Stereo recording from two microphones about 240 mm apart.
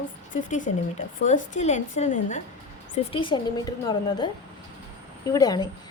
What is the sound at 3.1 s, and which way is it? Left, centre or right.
Speech, centre.